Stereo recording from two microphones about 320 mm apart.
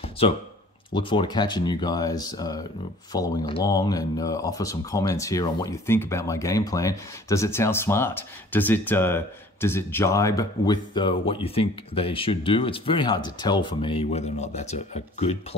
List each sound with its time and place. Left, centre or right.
0.9 s speech: centre